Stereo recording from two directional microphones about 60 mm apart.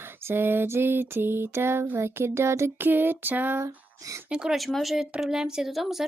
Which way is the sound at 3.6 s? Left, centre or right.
Right.